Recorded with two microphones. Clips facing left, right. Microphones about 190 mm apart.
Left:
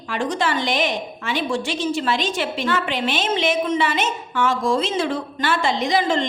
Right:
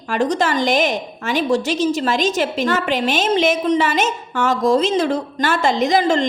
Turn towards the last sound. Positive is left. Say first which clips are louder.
# right 4 dB
turn(degrees=-40)  # may be behind; listen again after turning